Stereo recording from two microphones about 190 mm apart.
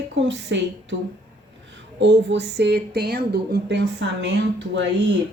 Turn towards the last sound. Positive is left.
turn(degrees=-70)  # may be behind; listen again after turning